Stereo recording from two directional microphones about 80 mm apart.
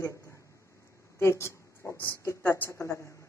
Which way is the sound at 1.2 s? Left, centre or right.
Left.